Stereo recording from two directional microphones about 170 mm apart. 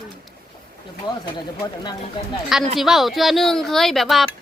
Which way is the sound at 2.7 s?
Centre (ahead or behind).